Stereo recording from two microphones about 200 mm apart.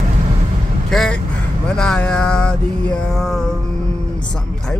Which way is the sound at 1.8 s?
5° left (ahead or behind).